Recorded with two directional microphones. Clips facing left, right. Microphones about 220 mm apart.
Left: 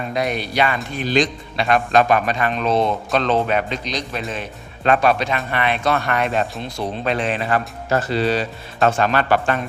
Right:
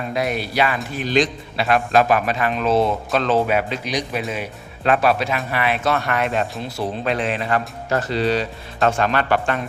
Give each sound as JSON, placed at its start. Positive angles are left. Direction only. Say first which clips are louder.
{"t": 0.1, "sound": "a man's voice", "louder": "even", "side_deg": -5}
{"t": 9.1, "sound": "speech", "louder": "left 2 dB", "side_deg": 35}